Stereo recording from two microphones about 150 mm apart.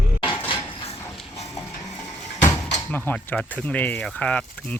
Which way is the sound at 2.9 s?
10° left (ahead or behind).